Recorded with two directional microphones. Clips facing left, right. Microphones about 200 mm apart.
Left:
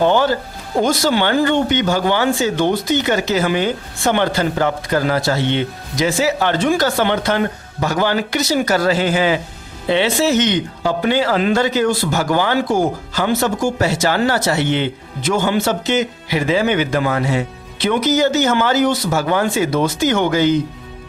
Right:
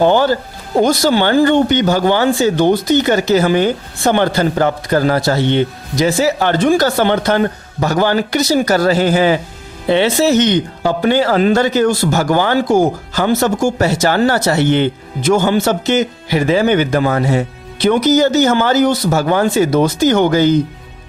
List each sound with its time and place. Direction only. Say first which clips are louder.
0.0 s speech: right 3 dB; 40° right (ahead or behind)